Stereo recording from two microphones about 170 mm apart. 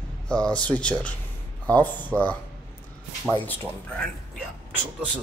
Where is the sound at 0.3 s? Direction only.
5° left (ahead or behind).